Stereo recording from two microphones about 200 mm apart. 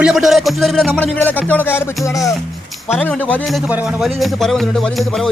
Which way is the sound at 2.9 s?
5° left (ahead or behind).